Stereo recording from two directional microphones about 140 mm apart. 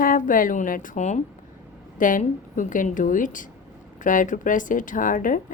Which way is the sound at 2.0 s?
70° left (ahead or behind).